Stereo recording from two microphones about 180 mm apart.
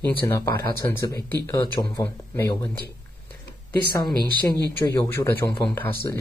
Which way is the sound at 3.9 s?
25° left (ahead or behind).